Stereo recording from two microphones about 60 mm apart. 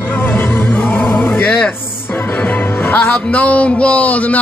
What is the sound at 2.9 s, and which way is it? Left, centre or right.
A man's voice, left.